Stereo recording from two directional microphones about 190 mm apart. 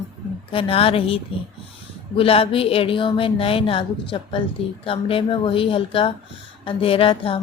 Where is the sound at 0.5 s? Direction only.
30° left (ahead or behind).